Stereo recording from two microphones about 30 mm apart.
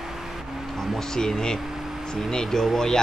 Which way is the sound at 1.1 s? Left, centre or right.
Centre.